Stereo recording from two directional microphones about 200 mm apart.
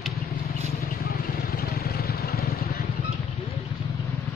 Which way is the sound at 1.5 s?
50° left (ahead or behind).